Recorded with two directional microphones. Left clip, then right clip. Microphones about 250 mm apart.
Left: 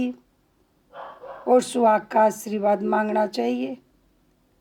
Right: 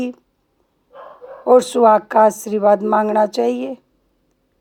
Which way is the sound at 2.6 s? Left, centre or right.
Right.